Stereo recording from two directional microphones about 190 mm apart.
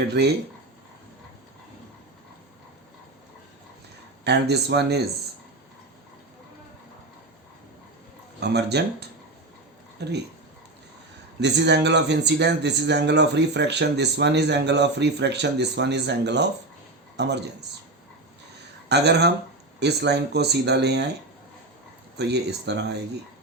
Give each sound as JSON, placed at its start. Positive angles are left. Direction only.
{"t": 0.1, "sound": "speech", "side_deg": -60}
{"t": 4.2, "sound": "speech", "side_deg": -60}
{"t": 8.4, "sound": "speech", "side_deg": -60}
{"t": 11.3, "sound": "speech", "side_deg": -65}
{"t": 18.9, "sound": "speech", "side_deg": -60}
{"t": 22.2, "sound": "speech", "side_deg": -60}